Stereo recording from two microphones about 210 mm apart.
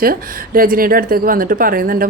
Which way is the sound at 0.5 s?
45° right (ahead or behind).